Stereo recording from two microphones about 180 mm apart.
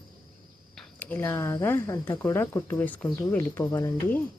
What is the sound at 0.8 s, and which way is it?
Speech, 10° left (ahead or behind).